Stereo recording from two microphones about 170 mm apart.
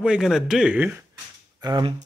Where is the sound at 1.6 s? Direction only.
30° right (ahead or behind).